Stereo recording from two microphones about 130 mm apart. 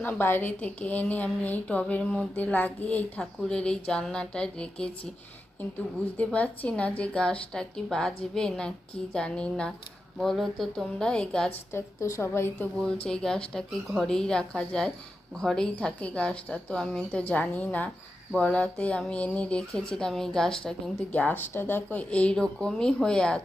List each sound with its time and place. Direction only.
0.0 s a woman's voice: 15° left (ahead or behind)
6.1 s a woman's voice: 10° left (ahead or behind)
11.7 s a woman's voice: 20° left (ahead or behind)
12.8 s a woman's voice: 5° left (ahead or behind)